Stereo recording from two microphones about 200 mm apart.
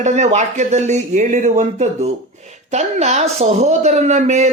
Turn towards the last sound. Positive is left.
turn(degrees=-35)  # may be behind; listen again after turning